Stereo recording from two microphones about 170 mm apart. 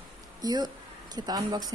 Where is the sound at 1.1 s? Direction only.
25° right (ahead or behind).